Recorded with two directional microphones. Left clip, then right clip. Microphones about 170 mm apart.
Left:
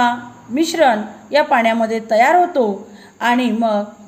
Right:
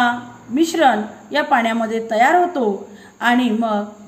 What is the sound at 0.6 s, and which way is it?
A woman's voice, 35° left (ahead or behind).